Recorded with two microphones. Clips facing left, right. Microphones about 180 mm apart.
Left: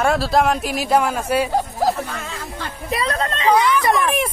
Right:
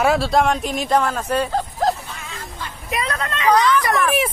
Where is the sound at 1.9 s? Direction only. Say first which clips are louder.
Left 4 dB; 75° left (ahead or behind).